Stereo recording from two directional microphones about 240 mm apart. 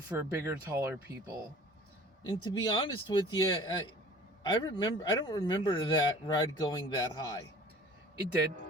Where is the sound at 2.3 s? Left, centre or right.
Centre.